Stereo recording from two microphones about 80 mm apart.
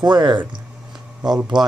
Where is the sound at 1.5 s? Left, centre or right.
Right.